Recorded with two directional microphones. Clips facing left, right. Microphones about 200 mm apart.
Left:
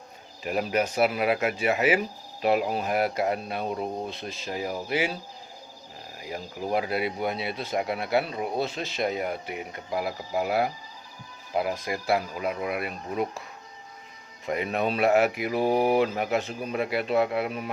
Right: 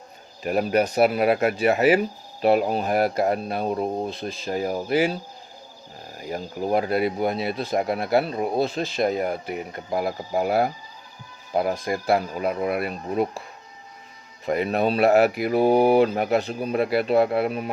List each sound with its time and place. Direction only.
0.4 s speech: 40° right (ahead or behind)
6.1 s speech: 45° right (ahead or behind)
14.4 s speech: 35° right (ahead or behind)